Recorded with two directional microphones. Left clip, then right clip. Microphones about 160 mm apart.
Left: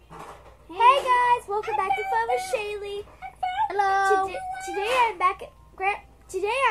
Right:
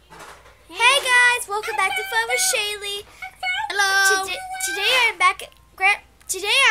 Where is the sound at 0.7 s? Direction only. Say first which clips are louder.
Right 2 dB; 10° right (ahead or behind).